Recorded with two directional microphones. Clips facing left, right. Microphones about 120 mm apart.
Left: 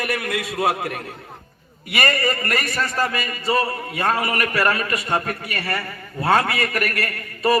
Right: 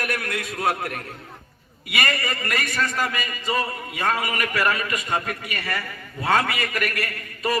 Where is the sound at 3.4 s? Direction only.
40° left (ahead or behind).